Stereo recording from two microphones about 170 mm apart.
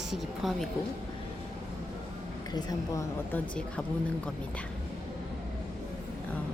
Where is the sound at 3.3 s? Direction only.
5° left (ahead or behind).